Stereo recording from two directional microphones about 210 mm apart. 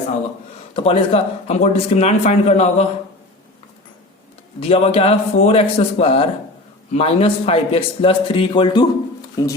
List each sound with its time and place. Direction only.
0.8 s a man's voice: 25° left (ahead or behind)
4.7 s a man's voice: 30° left (ahead or behind)